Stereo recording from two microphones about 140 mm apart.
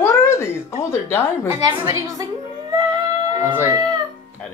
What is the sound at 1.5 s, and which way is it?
Speech, 25° right (ahead or behind).